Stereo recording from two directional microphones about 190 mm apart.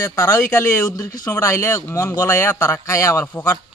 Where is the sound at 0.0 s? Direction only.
15° left (ahead or behind).